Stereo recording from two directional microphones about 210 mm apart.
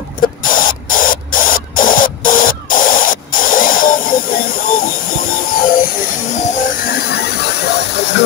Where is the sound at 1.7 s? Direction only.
40° left (ahead or behind).